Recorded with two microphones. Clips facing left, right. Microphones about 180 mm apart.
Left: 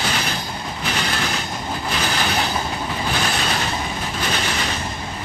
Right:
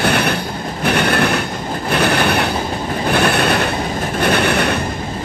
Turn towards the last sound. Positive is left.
turn(degrees=-60)  # may be behind; listen again after turning